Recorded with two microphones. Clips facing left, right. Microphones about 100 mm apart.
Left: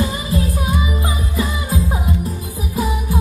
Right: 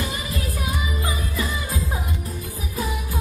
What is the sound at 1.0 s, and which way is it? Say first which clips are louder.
Music: left 5 dB; 25° left (ahead or behind).